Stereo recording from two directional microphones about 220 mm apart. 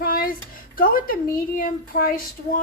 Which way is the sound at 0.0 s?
40° left (ahead or behind).